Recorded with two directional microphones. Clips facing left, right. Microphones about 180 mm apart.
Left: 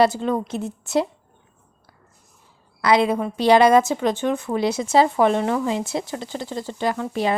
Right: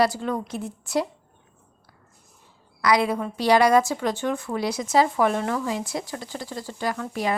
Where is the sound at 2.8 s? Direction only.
25° left (ahead or behind).